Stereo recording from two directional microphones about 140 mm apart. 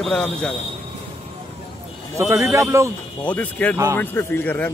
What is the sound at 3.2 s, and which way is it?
Speech, 10° left (ahead or behind).